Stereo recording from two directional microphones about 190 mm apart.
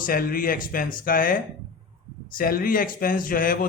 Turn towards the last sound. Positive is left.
turn(degrees=45)  # may be behind; listen again after turning